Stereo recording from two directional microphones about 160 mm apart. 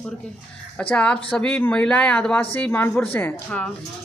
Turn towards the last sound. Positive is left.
turn(degrees=10)  # may be behind; listen again after turning